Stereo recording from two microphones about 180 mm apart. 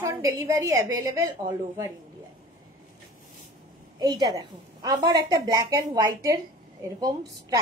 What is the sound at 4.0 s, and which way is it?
A woman's voice, 20° right (ahead or behind).